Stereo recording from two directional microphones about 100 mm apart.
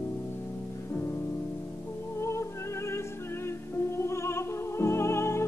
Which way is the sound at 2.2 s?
30° left (ahead or behind).